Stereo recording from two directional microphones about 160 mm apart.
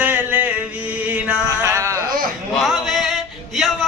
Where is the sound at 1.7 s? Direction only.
15° right (ahead or behind).